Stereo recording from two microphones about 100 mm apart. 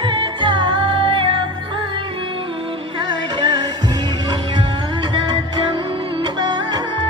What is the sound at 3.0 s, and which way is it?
Music, 50° right (ahead or behind).